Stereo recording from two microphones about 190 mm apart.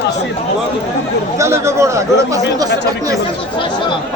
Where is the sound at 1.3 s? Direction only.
15° right (ahead or behind).